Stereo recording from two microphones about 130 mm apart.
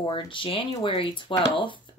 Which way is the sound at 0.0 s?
40° left (ahead or behind).